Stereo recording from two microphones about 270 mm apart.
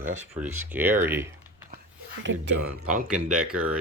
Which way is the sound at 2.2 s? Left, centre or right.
Right.